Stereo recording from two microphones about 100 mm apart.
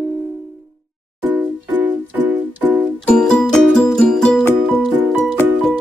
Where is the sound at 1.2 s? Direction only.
20° right (ahead or behind).